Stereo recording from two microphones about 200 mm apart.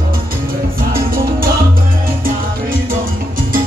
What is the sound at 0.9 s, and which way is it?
Music, 45° right (ahead or behind).